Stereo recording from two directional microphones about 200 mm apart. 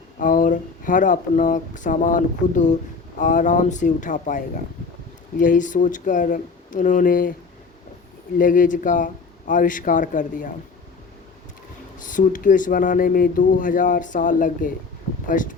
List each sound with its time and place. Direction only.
0.2 s speech: 40° left (ahead or behind)
8.4 s speech: 40° left (ahead or behind)
11.9 s speech: 40° left (ahead or behind)